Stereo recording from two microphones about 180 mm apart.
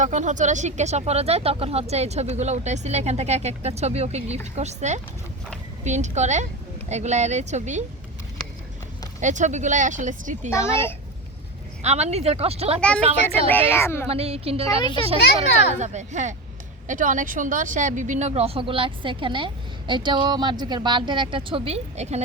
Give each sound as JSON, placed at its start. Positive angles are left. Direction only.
{"t": 0.0, "sound": "speech", "side_deg": -40}
{"t": 9.2, "sound": "speech", "side_deg": -45}
{"t": 10.5, "sound": "speech", "side_deg": 15}
{"t": 11.8, "sound": "speech", "side_deg": -35}
{"t": 13.5, "sound": "speech", "side_deg": 10}
{"t": 14.1, "sound": "speech", "side_deg": -35}
{"t": 14.8, "sound": "speech", "side_deg": 25}
{"t": 15.4, "sound": "speech", "side_deg": -40}